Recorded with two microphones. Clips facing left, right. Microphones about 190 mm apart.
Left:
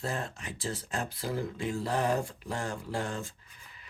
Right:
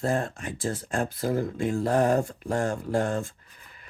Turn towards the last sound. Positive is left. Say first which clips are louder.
# right 8 dB
turn(degrees=-50)  # may be behind; listen again after turning